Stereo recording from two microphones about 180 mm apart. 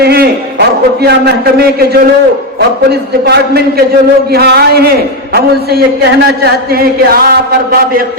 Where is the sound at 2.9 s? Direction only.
65° right (ahead or behind).